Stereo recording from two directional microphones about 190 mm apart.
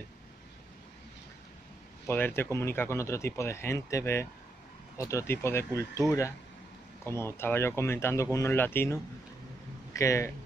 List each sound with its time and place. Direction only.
2.0 s speech: 10° left (ahead or behind)